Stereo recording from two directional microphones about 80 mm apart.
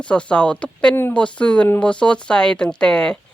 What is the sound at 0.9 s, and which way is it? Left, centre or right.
Speech, left.